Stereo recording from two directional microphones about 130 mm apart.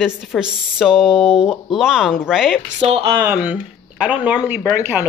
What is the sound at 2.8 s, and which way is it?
Speech, 50° right (ahead or behind).